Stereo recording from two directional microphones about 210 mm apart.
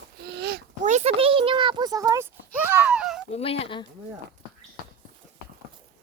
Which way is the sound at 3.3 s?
30° left (ahead or behind).